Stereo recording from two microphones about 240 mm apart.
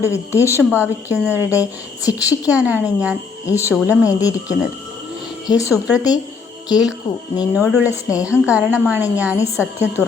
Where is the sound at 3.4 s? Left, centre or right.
Centre.